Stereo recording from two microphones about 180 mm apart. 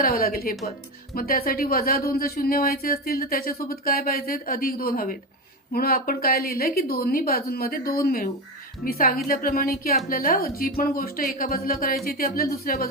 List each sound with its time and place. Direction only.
0.0 s speech: 55° left (ahead or behind)